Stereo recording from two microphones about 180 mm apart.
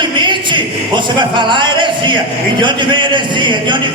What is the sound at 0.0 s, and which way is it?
Speech, 25° right (ahead or behind).